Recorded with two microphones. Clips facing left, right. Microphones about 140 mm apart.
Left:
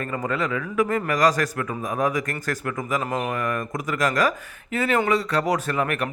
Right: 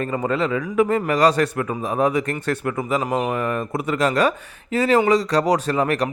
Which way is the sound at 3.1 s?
15° right (ahead or behind).